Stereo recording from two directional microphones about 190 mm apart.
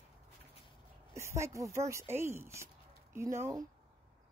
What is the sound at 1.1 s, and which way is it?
Speech, 15° right (ahead or behind).